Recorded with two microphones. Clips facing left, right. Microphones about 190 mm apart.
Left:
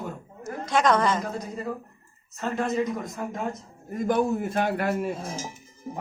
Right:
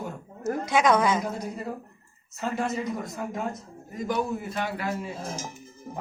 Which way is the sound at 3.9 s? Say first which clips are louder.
Left 5 dB; 55° left (ahead or behind).